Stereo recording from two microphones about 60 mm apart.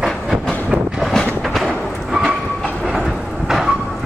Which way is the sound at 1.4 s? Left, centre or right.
Centre.